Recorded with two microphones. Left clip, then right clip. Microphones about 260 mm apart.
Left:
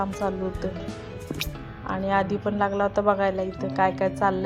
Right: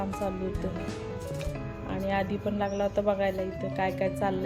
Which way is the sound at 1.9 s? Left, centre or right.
Centre.